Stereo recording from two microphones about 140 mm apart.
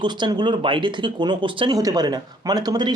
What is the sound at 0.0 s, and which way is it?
Speech, 30° right (ahead or behind).